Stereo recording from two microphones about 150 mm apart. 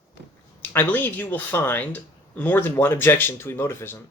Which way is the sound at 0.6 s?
10° left (ahead or behind).